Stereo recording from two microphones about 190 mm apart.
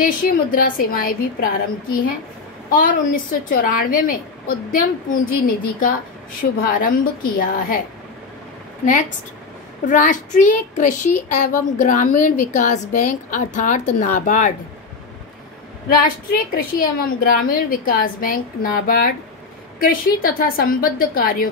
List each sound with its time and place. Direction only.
0.0 s a woman's voice: 50° left (ahead or behind)
9.8 s a woman's voice: 45° left (ahead or behind)
15.9 s a woman's voice: 50° left (ahead or behind)